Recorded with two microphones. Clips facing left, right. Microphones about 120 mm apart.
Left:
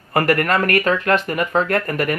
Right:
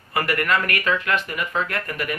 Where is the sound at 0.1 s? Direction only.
45° left (ahead or behind).